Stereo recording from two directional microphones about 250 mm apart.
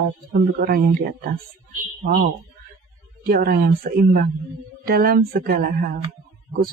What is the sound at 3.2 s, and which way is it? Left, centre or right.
Speech, right.